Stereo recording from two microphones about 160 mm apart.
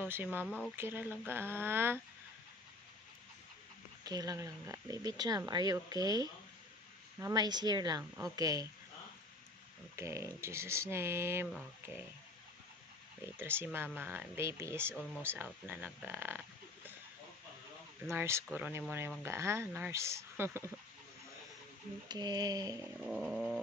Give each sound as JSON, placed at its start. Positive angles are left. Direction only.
{"t": 0.0, "sound": "speech", "side_deg": -15}
{"t": 4.0, "sound": "speech", "side_deg": -25}
{"t": 9.9, "sound": "speech", "side_deg": -20}
{"t": 13.2, "sound": "speech", "side_deg": -15}
{"t": 18.1, "sound": "speech", "side_deg": -15}
{"t": 22.0, "sound": "speech", "side_deg": -25}
{"t": 23.0, "sound": "cat", "side_deg": 0}